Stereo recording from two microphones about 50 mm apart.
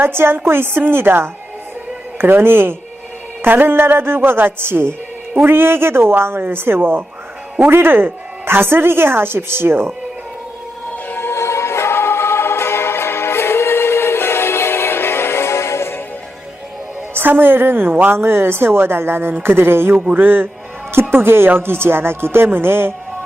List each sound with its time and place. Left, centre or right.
0.0 s a woman's voice: right
11.1 s music: left
17.2 s a woman's voice: right